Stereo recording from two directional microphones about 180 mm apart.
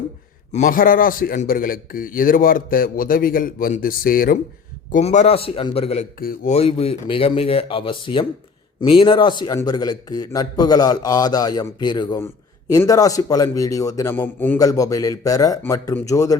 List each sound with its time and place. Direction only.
0.5 s a man's voice: 45° left (ahead or behind)
4.9 s speech: 40° left (ahead or behind)
6.1 s a man's voice: 55° left (ahead or behind)
6.5 s a man's voice: 35° left (ahead or behind); by 16.4 s 20° left (ahead or behind)